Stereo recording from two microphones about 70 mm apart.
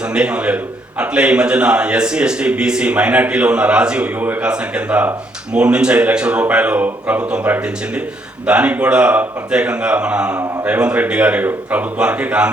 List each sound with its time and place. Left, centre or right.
0.1 s a man's voice: centre